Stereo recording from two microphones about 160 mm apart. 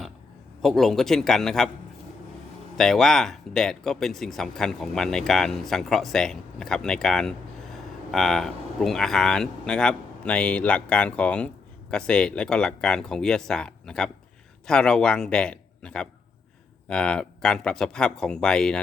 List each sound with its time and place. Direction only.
0.6 s speech: centre (ahead or behind)
2.7 s speech: centre (ahead or behind)